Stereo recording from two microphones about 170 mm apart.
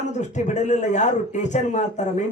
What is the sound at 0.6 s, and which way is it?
Speech, 45° left (ahead or behind).